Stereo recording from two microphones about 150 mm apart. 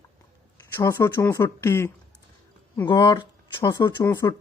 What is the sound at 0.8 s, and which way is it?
Speech, 15° left (ahead or behind).